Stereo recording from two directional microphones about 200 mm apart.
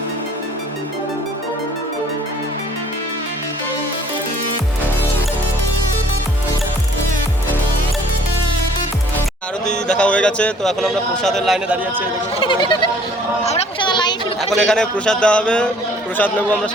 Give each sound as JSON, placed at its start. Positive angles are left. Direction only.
{"t": 10.0, "sound": "a man's voice", "side_deg": 5}
{"t": 12.4, "sound": "goat", "side_deg": 25}
{"t": 13.4, "sound": "a sound", "side_deg": 30}
{"t": 14.6, "sound": "a man's voice", "side_deg": 5}